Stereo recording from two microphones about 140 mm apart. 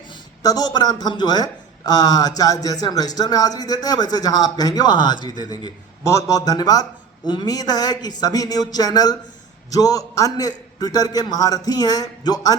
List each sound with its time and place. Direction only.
0.4 s speech: 30° left (ahead or behind)